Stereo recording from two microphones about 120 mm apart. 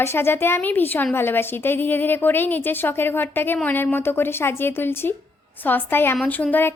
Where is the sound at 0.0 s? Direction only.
20° left (ahead or behind).